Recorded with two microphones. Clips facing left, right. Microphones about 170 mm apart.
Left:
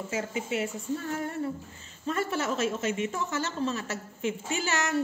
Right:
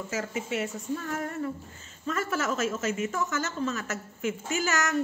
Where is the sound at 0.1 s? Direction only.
30° left (ahead or behind).